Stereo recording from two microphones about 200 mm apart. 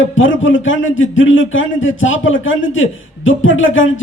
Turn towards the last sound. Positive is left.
turn(degrees=75)  # may be behind; listen again after turning